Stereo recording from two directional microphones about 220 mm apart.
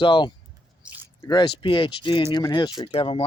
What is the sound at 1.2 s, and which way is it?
Speech, 20° left (ahead or behind).